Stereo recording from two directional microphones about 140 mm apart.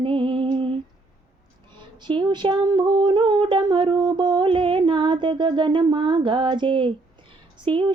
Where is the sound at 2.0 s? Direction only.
35° right (ahead or behind).